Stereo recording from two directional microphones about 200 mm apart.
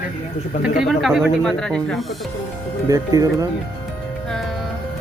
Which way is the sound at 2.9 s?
20° right (ahead or behind).